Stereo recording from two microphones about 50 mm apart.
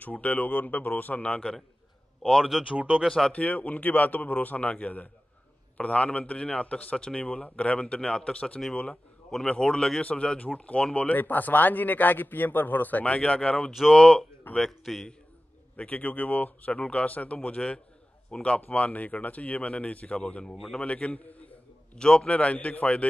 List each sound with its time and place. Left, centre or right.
0.0 s speech: left; by 3.3 s centre
3.3 s speech: left
11.0 s speech: left
13.7 s a man's voice: centre
13.9 s a man's voice: centre
15.7 s a man's voice: left
21.9 s speech: centre